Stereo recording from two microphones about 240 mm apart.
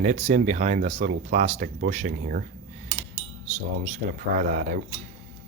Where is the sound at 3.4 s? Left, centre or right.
Right.